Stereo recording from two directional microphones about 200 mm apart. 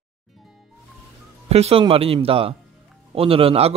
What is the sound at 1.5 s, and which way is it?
A man's voice, 30° right (ahead or behind).